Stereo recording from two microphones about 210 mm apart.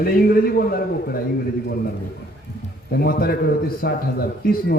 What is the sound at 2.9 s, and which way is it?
A man's voice, 45° left (ahead or behind).